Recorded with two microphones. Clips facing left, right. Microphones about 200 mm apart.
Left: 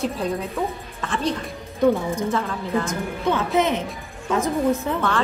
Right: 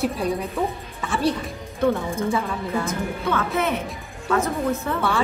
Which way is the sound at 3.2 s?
20° left (ahead or behind).